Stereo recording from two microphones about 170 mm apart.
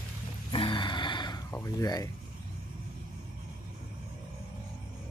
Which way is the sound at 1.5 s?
20° left (ahead or behind).